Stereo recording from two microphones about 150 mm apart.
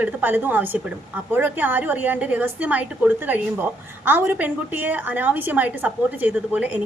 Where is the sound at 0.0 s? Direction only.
10° right (ahead or behind).